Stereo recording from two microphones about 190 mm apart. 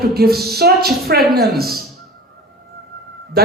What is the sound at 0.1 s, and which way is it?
A man's voice, 55° right (ahead or behind).